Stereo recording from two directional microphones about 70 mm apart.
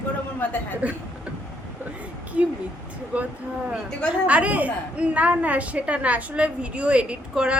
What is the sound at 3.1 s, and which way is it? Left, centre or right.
A woman's voice, centre.